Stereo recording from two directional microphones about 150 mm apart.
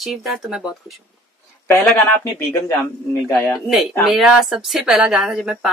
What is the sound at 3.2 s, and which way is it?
Speech, 15° left (ahead or behind).